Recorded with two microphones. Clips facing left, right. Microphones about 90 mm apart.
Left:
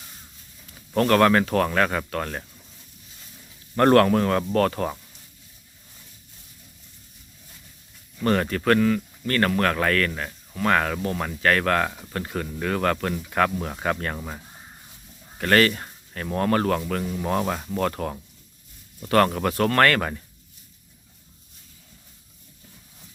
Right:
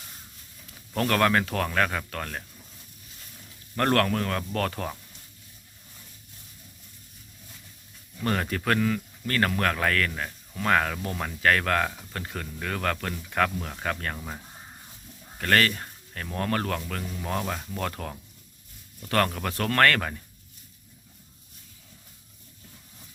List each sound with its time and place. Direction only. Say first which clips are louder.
0.9 s speech: left 5 dB; centre (ahead or behind)
3.8 s speech: left 7 dB; 20° left (ahead or behind)
4.5 s speech: left 7 dB; 5° left (ahead or behind)
8.2 s speech: left 5 dB; centre (ahead or behind); by 14.0 s 20° left (ahead or behind)
15.4 s speech: left 4 dB; 5° left (ahead or behind)
16.8 s speech: left 7 dB; 20° left (ahead or behind)
17.7 s speech: left 7 dB; 5° left (ahead or behind)